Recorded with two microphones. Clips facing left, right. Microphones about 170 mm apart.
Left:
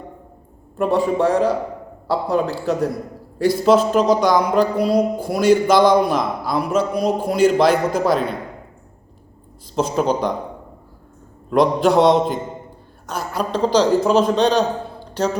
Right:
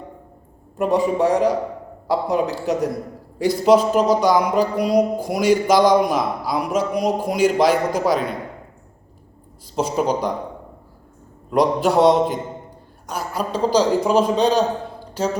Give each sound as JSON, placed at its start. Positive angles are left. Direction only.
{"t": 0.8, "sound": "a man's voice", "side_deg": -15}
{"t": 9.7, "sound": "a man's voice", "side_deg": -10}
{"t": 11.5, "sound": "a man's voice", "side_deg": -10}